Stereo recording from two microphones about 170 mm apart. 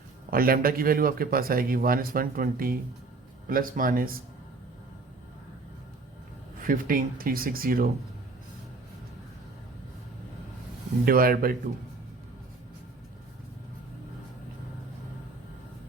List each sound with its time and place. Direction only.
0.3 s speech: 60° right (ahead or behind)
6.6 s speech: 55° right (ahead or behind)
11.0 s speech: 60° right (ahead or behind)